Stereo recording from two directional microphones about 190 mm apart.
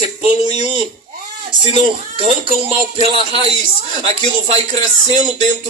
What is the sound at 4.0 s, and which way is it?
Speech, 30° right (ahead or behind).